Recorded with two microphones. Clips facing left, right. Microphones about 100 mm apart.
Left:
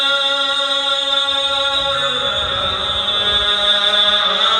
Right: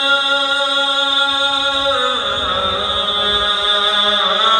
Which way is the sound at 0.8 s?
55° right (ahead or behind).